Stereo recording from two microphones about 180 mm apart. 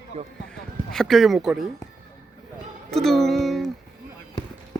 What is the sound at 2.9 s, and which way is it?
Music, centre (ahead or behind).